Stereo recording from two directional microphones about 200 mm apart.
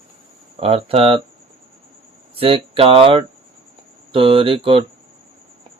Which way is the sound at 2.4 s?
25° right (ahead or behind).